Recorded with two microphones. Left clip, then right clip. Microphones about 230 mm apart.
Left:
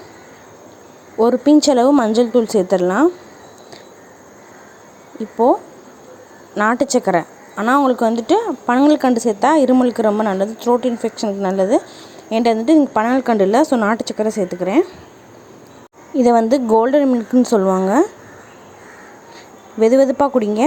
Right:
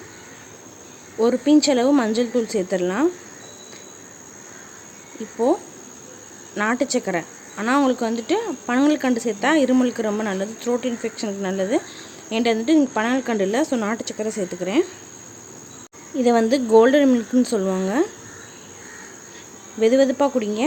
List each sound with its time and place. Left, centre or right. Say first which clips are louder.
1.2 s a woman's voice: left 5 dB; centre
5.2 s a woman's voice: left 6 dB; centre
6.6 s a woman's voice: left 6 dB; centre
16.1 s a woman's voice: left 5 dB; centre
19.8 s a woman's voice: left 4 dB; centre